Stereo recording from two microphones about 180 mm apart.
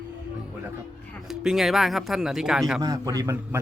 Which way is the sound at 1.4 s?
Centre (ahead or behind).